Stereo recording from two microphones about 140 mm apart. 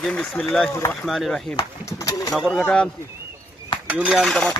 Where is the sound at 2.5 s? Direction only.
10° left (ahead or behind).